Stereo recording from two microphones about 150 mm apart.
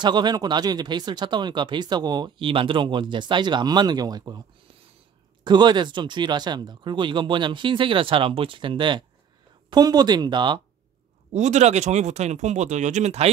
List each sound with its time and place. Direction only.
0.0 s speech: 30° right (ahead or behind)
11.3 s speech: 50° right (ahead or behind)